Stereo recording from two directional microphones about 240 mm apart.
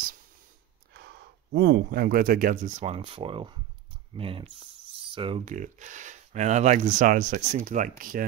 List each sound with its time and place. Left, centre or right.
0.9 s speech: right